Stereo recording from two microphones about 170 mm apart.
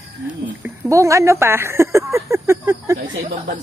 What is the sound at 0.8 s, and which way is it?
Speech, 20° right (ahead or behind).